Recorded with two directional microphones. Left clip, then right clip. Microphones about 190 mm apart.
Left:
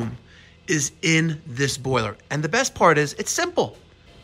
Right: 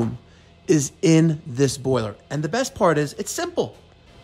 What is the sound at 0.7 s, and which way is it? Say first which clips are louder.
Speech: right 3 dB; 30° right (ahead or behind).